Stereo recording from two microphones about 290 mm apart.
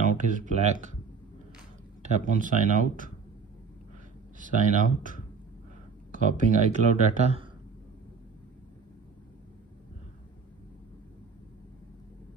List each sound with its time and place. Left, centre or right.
0.0 s speech: right
2.0 s speech: right
4.4 s speech: right
6.1 s speech: right